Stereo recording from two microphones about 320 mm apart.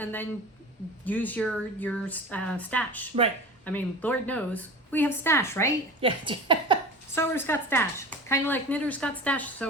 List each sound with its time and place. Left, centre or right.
0.0 s a woman's voice: centre
6.0 s a woman's voice: centre
7.2 s speech: centre